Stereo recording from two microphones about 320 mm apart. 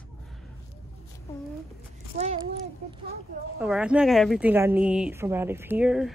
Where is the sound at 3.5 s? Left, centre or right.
Centre.